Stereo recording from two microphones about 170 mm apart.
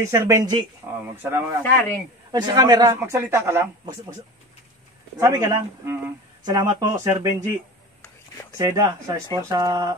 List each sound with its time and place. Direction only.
0.0 s speech: 20° right (ahead or behind)
1.6 s a man's voice: 10° left (ahead or behind)
2.3 s speech: 25° right (ahead or behind)
5.2 s speech: 20° right (ahead or behind)
8.5 s speech: 20° right (ahead or behind)